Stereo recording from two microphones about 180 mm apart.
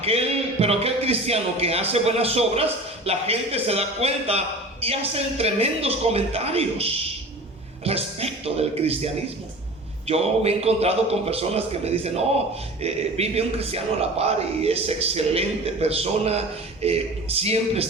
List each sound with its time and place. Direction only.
0.0 s a man's voice: 35° right (ahead or behind)
10.1 s a man's voice: 35° right (ahead or behind)